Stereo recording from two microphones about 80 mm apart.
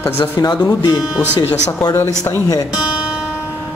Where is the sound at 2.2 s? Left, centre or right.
Left.